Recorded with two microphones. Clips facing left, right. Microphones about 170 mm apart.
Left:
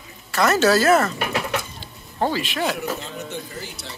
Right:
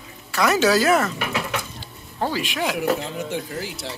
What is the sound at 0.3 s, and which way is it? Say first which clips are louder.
Speech: left 1 dB; 10° right (ahead or behind).